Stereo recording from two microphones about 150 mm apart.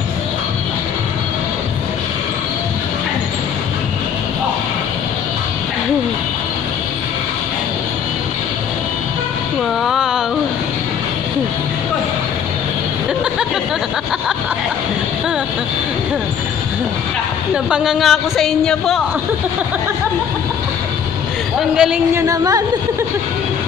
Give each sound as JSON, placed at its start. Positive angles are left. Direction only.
{"t": 9.8, "sound": "a sound", "side_deg": -5}
{"t": 17.6, "sound": "speech", "side_deg": -5}
{"t": 21.5, "sound": "speech", "side_deg": -5}
{"t": 22.1, "sound": "a woman's voice", "side_deg": -20}